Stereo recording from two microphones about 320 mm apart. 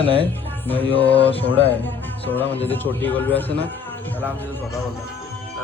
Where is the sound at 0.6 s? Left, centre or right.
Centre.